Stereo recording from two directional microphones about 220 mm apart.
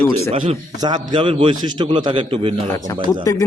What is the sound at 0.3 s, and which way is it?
A man's voice, 20° right (ahead or behind).